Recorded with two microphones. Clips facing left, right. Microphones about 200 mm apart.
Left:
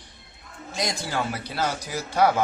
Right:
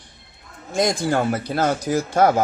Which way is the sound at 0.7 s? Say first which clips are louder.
Right 9 dB; 50° right (ahead or behind).